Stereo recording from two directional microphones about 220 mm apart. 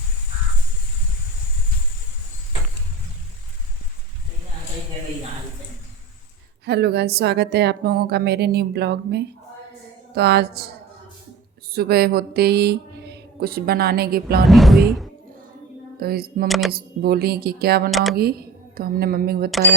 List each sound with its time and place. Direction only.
6.7 s speech: 50° right (ahead or behind)
11.7 s mantra: 45° right (ahead or behind)
14.4 s speech: centre (ahead or behind)
16.0 s speech: 45° right (ahead or behind)
16.5 s speech: centre (ahead or behind)
16.7 s speech: 45° right (ahead or behind)
17.9 s speech: centre (ahead or behind)
18.2 s speech: 45° right (ahead or behind)